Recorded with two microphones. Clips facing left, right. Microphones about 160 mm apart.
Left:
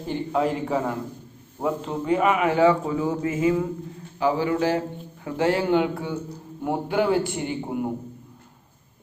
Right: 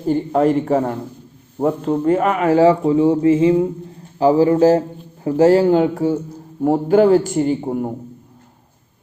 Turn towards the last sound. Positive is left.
turn(degrees=-40)  # may be behind; listen again after turning